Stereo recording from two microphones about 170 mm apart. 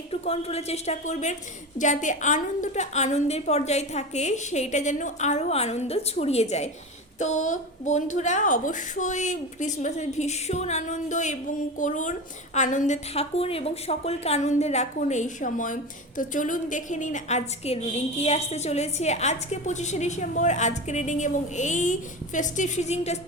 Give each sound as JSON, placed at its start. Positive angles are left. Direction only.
{"t": 0.1, "sound": "a woman's voice", "side_deg": 35}